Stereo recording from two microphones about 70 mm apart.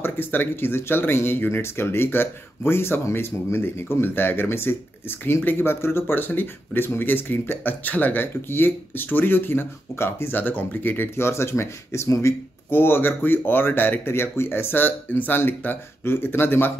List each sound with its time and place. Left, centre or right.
0.0 s speech: left